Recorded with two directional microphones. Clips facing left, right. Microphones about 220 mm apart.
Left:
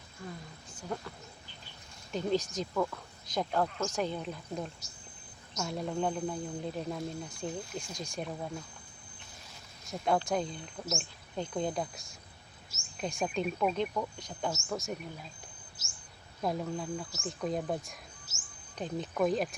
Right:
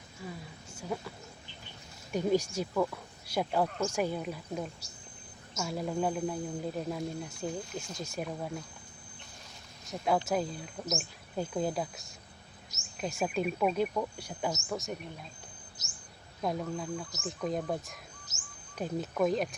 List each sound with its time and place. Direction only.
0.3 s speech: 5° right (ahead or behind)
2.1 s speech: 10° right (ahead or behind)
9.8 s speech: centre (ahead or behind)
16.4 s speech: centre (ahead or behind)
18.3 s bird: 15° right (ahead or behind)
18.8 s speech: 10° right (ahead or behind)
19.1 s speech: 5° left (ahead or behind)